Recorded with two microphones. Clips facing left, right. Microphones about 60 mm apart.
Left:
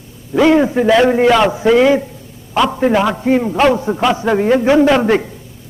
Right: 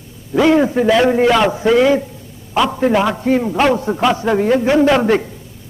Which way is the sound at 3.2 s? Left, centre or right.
Centre.